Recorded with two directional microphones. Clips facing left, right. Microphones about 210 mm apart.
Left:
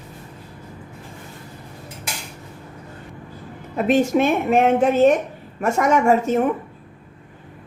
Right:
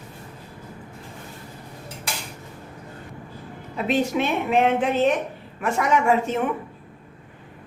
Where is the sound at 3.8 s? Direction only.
45° left (ahead or behind).